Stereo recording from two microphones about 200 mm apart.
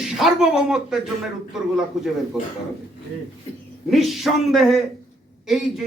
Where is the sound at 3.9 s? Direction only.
Centre (ahead or behind).